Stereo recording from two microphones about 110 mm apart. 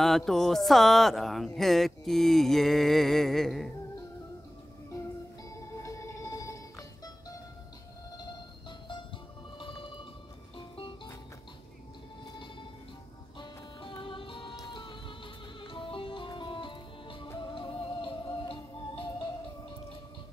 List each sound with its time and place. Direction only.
0.0 s speech: 5° left (ahead or behind)
5.5 s music: 30° left (ahead or behind)
9.6 s music: 50° left (ahead or behind)
13.4 s music: 45° left (ahead or behind)